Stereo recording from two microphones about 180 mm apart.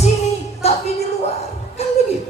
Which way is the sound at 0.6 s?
35° left (ahead or behind).